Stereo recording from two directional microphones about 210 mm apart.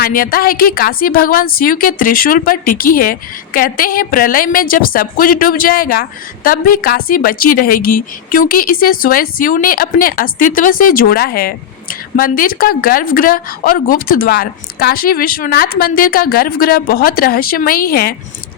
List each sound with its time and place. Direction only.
0.0 s a woman's voice: 40° left (ahead or behind)